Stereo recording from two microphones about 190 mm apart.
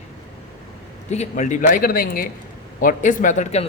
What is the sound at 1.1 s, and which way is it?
A man's voice, 40° left (ahead or behind).